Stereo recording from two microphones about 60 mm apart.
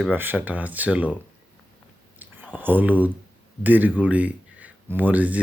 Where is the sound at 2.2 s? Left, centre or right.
Right.